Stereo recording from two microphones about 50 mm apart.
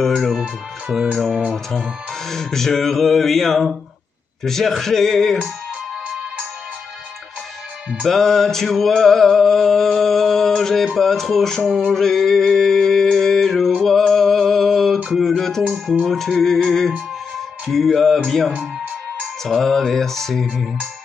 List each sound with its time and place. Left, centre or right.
0.9 s music: centre
8.1 s music: centre
12.8 s a sound: centre
15.1 s music: centre
15.6 s speech: centre
16.1 s music: centre